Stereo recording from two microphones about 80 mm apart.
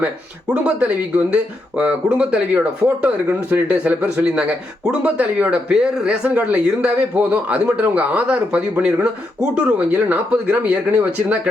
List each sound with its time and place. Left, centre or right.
0.0 s speech: centre